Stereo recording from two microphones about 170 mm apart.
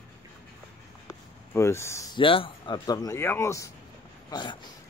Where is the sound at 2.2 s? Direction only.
30° left (ahead or behind).